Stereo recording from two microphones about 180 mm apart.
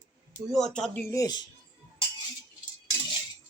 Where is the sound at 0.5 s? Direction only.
Centre (ahead or behind); by 1.4 s 20° left (ahead or behind).